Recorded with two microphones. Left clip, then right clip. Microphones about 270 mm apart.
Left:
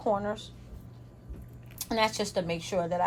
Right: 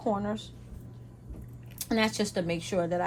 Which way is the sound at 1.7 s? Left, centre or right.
Centre.